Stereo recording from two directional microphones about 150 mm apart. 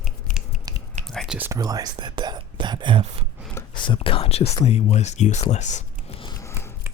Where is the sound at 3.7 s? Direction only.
35° left (ahead or behind); by 5.8 s 50° left (ahead or behind).